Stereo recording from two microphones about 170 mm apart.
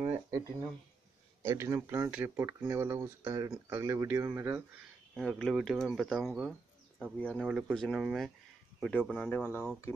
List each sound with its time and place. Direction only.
0.3 s speech: 20° right (ahead or behind)
5.1 s speech: 5° left (ahead or behind)
7.3 s speech: 5° right (ahead or behind); by 9.7 s 10° left (ahead or behind)